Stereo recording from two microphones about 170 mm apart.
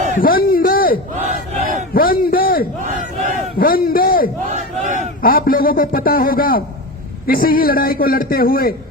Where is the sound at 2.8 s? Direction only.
45° right (ahead or behind).